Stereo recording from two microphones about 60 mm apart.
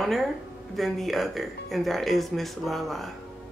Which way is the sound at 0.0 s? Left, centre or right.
Centre.